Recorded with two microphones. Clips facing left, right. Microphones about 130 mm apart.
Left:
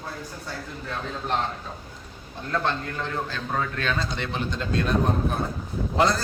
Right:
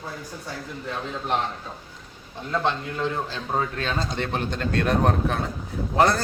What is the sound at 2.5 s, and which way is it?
Speech, 15° right (ahead or behind).